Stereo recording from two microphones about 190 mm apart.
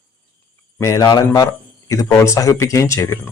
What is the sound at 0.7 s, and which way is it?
A man's voice, 15° left (ahead or behind).